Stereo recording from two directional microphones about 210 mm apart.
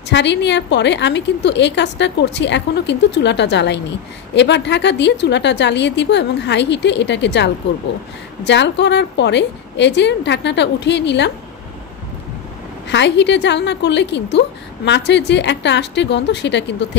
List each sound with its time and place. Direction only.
0.1 s a woman's voice: 55° left (ahead or behind)
12.8 s a woman's voice: 55° left (ahead or behind)